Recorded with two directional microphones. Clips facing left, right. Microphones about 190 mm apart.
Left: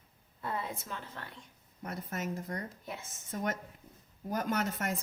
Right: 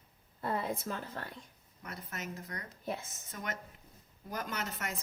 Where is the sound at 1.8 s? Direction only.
50° left (ahead or behind).